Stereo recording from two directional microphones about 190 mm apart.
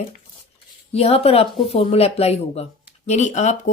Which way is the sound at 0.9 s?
35° left (ahead or behind).